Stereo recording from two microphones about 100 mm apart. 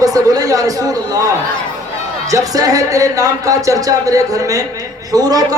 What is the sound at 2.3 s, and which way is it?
A man's voice, 35° right (ahead or behind).